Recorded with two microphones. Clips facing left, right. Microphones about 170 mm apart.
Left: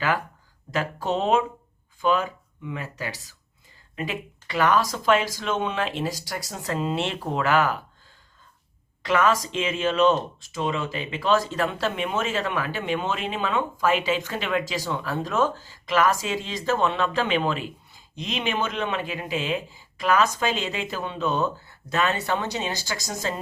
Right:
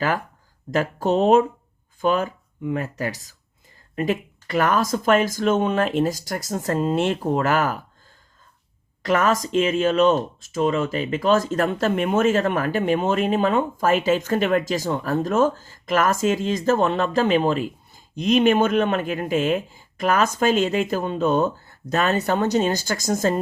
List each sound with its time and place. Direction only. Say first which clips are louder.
0.7 s speech: right 5 dB; 45° right (ahead or behind)
9.0 s speech: right 2 dB; 45° right (ahead or behind)